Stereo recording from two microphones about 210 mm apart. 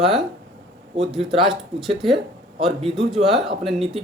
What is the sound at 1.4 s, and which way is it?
Speech, centre (ahead or behind).